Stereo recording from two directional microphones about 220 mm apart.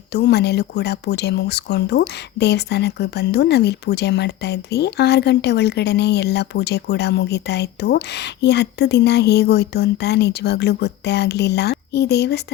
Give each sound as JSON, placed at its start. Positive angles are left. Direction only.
{"t": 0.1, "sound": "speech", "side_deg": 50}